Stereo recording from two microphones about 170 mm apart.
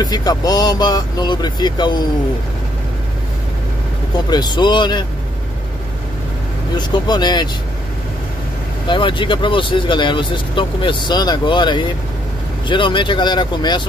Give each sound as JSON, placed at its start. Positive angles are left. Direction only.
{"t": 0.0, "sound": "speech", "side_deg": 25}
{"t": 4.3, "sound": "speech", "side_deg": 25}
{"t": 6.9, "sound": "speech", "side_deg": 25}
{"t": 8.8, "sound": "speech", "side_deg": 30}